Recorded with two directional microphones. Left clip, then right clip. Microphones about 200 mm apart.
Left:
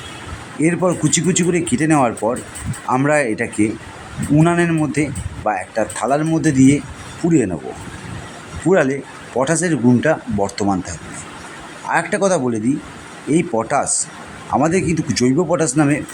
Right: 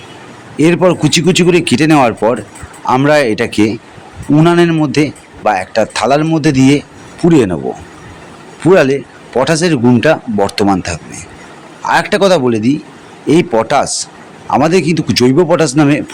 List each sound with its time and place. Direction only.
0.6 s speech: 15° right (ahead or behind)
8.8 s speech: 10° right (ahead or behind)